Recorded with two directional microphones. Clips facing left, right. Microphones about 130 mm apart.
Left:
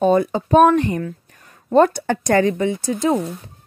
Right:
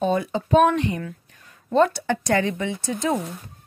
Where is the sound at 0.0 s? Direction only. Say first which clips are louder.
Left 6 dB; 45° left (ahead or behind).